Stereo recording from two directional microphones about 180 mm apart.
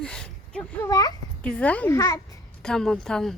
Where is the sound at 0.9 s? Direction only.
20° left (ahead or behind).